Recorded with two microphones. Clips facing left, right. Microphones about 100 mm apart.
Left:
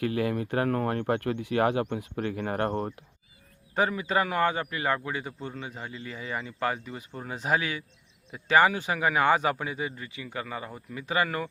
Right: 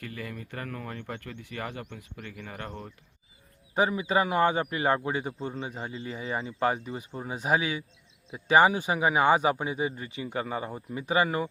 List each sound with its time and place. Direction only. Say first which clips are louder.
0.0 s speech: left 11 dB; 65° left (ahead or behind)
3.8 s a man's voice: right 1 dB; 15° right (ahead or behind)
7.2 s a man's voice: right 1 dB; 15° right (ahead or behind)